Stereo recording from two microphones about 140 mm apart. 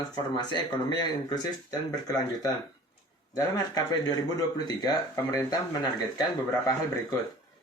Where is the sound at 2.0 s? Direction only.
25° left (ahead or behind).